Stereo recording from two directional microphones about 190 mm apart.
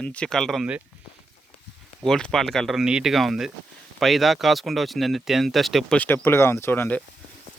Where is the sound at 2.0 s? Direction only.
5° left (ahead or behind).